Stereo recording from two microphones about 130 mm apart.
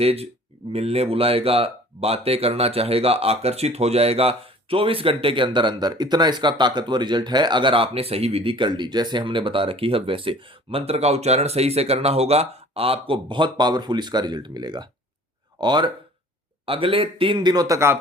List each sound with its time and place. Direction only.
0.0 s a man's voice: 50° right (ahead or behind); by 17.9 s 25° right (ahead or behind)